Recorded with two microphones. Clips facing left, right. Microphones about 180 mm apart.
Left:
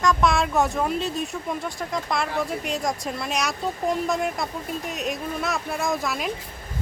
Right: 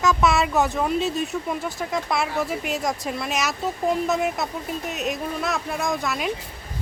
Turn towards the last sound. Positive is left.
turn(degrees=0)  # may be behind; listen again after turning